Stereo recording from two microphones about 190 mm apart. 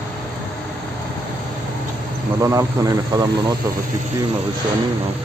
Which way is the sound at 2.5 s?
20° right (ahead or behind).